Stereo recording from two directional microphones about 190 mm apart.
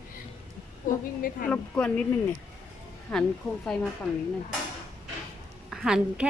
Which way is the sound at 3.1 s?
5° left (ahead or behind).